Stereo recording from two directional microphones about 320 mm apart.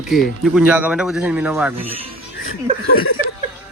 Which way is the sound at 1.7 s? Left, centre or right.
Centre.